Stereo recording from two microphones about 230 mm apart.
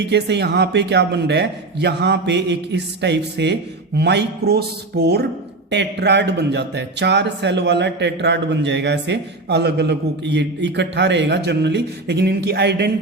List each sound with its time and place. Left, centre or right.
0.0 s speech: right